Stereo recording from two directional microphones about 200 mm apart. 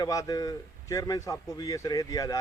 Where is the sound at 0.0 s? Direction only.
15° left (ahead or behind).